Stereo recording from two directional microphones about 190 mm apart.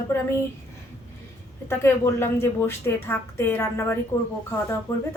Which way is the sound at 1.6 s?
15° left (ahead or behind).